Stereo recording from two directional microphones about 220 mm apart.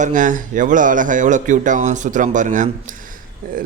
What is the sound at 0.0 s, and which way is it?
Speech, 35° right (ahead or behind).